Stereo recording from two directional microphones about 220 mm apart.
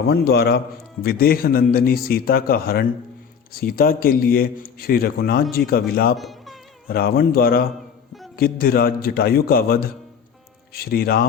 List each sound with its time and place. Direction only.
0.1 s a man's voice: 45° left (ahead or behind)
6.1 s music: centre (ahead or behind)
6.8 s a man's voice: 45° left (ahead or behind)